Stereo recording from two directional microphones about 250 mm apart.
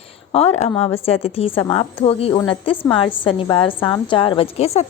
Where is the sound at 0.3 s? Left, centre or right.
Left.